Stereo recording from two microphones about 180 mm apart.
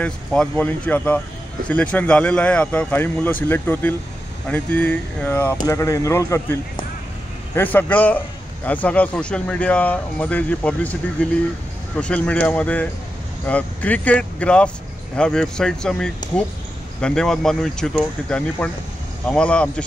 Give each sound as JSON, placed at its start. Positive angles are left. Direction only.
{"t": 0.0, "sound": "speech", "side_deg": 5}